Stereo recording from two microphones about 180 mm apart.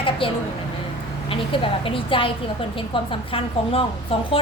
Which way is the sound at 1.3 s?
30° left (ahead or behind).